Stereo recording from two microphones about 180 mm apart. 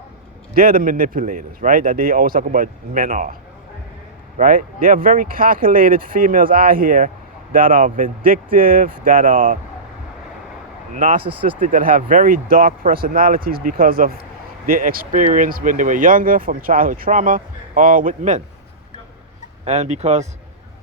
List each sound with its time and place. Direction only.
0.5 s speech: 50° right (ahead or behind)
4.4 s speech: 50° right (ahead or behind)
10.9 s speech: 50° right (ahead or behind)
19.6 s speech: 40° right (ahead or behind)